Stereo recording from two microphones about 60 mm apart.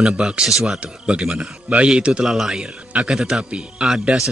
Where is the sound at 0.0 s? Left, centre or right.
Centre.